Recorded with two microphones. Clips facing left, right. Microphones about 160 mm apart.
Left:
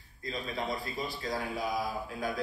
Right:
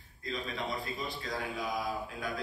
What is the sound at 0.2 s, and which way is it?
A man's voice, 35° left (ahead or behind).